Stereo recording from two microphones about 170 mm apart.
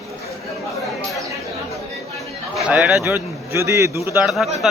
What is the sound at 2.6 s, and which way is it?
A man's voice, 5° right (ahead or behind).